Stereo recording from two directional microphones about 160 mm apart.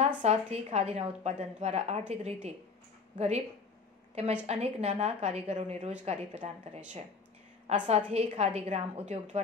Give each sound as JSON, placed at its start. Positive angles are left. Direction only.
{"t": 0.0, "sound": "a woman's voice", "side_deg": -40}